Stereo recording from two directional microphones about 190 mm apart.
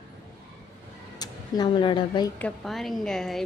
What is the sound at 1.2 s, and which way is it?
Speech, 20° left (ahead or behind).